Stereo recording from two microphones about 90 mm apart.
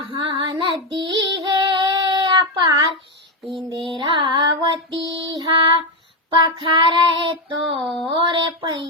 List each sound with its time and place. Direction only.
0.0 s female singing: 60° right (ahead or behind)
2.4 s child singing: 50° right (ahead or behind)
3.8 s child singing: 65° right (ahead or behind)
7.8 s speech: 5° left (ahead or behind)
8.0 s child singing: 60° right (ahead or behind)